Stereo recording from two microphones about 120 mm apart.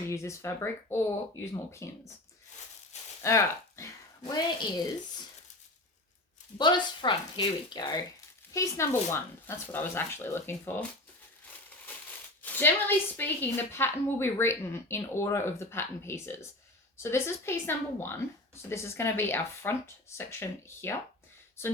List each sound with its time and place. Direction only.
0.1 s a woman's voice: 25° left (ahead or behind)
3.2 s speech: 25° left (ahead or behind)
6.6 s speech: 40° left (ahead or behind)
8.5 s a woman's voice: 25° left (ahead or behind)
12.4 s a woman's voice: 15° left (ahead or behind)